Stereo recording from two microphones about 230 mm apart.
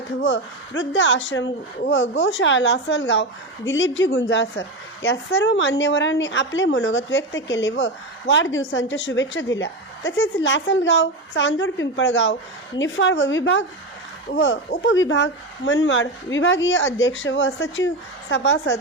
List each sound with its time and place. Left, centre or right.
0.2 s a woman's voice: left